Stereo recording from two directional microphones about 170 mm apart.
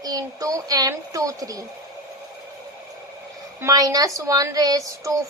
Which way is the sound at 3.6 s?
20° right (ahead or behind).